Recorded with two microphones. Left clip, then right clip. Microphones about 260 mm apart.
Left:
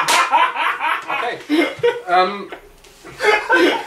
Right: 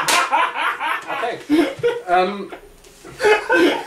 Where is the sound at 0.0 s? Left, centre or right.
Centre.